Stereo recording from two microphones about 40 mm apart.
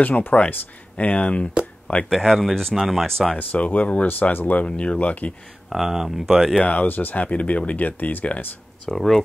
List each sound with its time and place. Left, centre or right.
0.0 s speech: left
2.0 s speech: centre
3.5 s speech: left
4.1 s speech: left
4.6 s speech: left
5.7 s speech: centre
6.6 s speech: left
8.8 s speech: centre